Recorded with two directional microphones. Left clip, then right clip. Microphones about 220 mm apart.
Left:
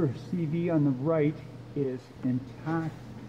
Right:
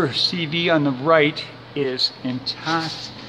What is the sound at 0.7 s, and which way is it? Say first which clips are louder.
Speech: right 9 dB; 25° right (ahead or behind).